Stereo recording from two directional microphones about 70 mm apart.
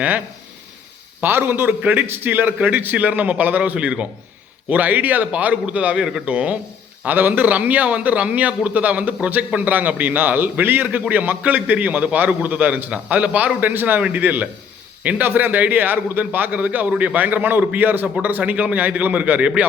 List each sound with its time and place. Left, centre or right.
1.2 s a man's voice: right